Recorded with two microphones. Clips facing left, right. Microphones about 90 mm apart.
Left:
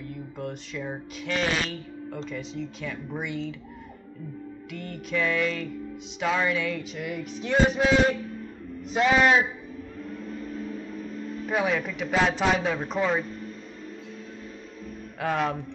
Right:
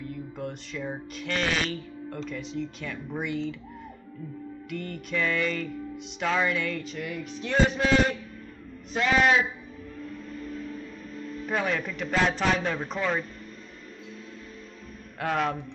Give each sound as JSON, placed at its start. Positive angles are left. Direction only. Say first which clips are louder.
{"t": 0.1, "sound": "music", "louder": "even", "side_deg": 0}
{"t": 4.6, "sound": "music", "louder": "right 2 dB", "side_deg": 0}
{"t": 10.0, "sound": "music", "louder": "left 2 dB", "side_deg": 40}
{"t": 11.4, "sound": "music", "louder": "left 2 dB", "side_deg": 5}
{"t": 15.1, "sound": "music", "louder": "left 1 dB", "side_deg": 0}